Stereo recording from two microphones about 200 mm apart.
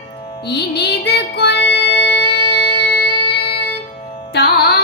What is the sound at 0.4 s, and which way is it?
Music, 55° left (ahead or behind).